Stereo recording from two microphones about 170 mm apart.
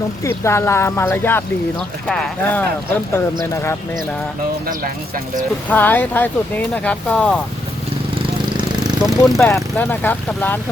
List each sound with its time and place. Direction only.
0.3 s speech: 15° left (ahead or behind)
5.6 s speech: 10° left (ahead or behind)
8.8 s a sound: 5° right (ahead or behind)
9.3 s speech: 15° left (ahead or behind)